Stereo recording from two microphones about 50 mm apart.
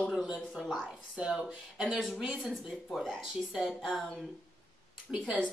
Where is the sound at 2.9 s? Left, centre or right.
Centre.